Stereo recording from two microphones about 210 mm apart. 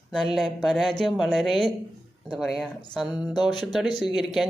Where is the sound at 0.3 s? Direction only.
Centre (ahead or behind).